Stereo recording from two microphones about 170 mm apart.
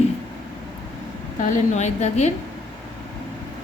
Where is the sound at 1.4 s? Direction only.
40° left (ahead or behind).